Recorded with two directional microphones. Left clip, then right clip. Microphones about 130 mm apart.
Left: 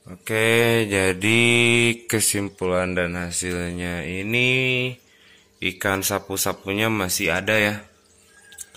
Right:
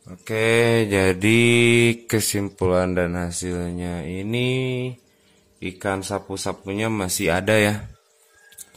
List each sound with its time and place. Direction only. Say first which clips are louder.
0.1 s speech: even; centre (ahead or behind)
0.7 s speech: right 1 dB; 20° right (ahead or behind)
2.6 s speech: right 2 dB; 45° right (ahead or behind)
3.4 s speech: left 1 dB; 25° right (ahead or behind)
5.6 s speech: left 3 dB; 10° right (ahead or behind)
7.1 s speech: right 1 dB; 40° right (ahead or behind)